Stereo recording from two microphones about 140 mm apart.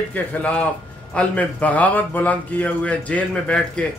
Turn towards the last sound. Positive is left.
turn(degrees=5)  # may be behind; listen again after turning